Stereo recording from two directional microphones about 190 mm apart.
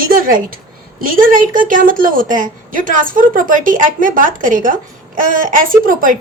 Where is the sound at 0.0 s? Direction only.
50° right (ahead or behind).